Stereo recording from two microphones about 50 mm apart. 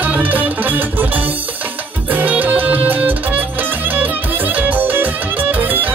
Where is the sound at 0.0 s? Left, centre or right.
Right.